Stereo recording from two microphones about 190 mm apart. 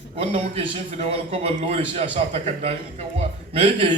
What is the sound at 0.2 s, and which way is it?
A man's voice, 30° right (ahead or behind).